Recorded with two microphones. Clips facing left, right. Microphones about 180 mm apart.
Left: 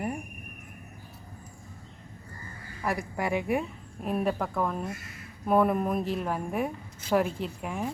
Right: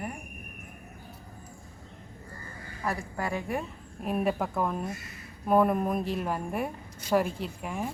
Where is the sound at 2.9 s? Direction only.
15° left (ahead or behind).